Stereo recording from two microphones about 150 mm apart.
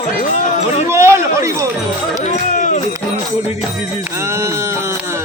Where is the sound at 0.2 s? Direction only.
55° left (ahead or behind).